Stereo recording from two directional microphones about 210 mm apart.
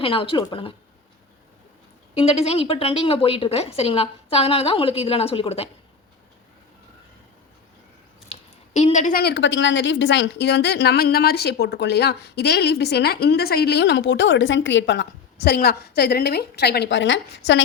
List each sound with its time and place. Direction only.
0.0 s a woman's voice: 25° left (ahead or behind)
2.1 s a woman's voice: 30° left (ahead or behind)
8.3 s a woman's voice: 30° left (ahead or behind); by 17.6 s 60° left (ahead or behind)